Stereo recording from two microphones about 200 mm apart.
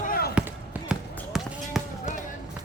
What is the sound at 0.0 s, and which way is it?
Basketball bounce, 45° left (ahead or behind).